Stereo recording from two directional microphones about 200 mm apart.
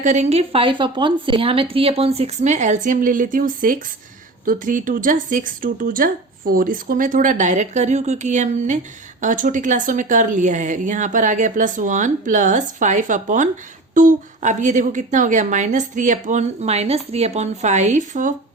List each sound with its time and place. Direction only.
0.0 s a woman's voice: 35° right (ahead or behind)